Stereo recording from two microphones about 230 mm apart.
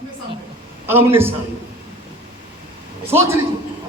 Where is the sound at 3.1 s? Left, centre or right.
Centre.